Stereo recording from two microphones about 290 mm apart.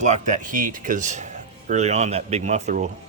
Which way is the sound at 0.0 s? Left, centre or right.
Right.